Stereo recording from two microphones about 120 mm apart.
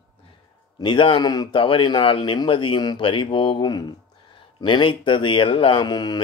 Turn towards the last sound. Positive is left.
turn(degrees=35)  # may be behind; listen again after turning